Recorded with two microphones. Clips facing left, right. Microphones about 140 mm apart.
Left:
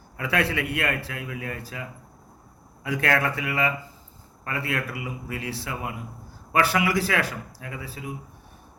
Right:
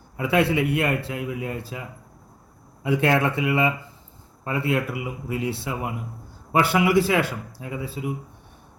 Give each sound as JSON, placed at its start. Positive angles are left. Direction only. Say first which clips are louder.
{"t": 0.2, "sound": "a man's voice", "louder": "right 5 dB", "side_deg": -20}
{"t": 2.8, "sound": "a man's voice", "louder": "right 4 dB", "side_deg": -25}